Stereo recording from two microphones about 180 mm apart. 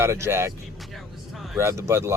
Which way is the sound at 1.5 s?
15° right (ahead or behind).